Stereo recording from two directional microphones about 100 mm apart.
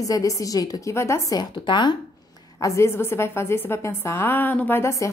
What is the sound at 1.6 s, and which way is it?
Speech, 50° left (ahead or behind).